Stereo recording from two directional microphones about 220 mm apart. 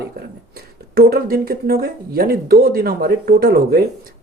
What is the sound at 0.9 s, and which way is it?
A man's voice, 45° right (ahead or behind).